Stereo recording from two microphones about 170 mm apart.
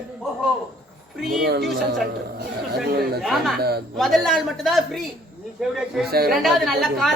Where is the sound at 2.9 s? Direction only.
65° right (ahead or behind).